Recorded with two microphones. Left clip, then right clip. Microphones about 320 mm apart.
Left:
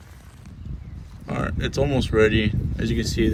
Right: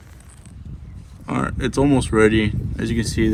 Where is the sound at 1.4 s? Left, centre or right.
Centre.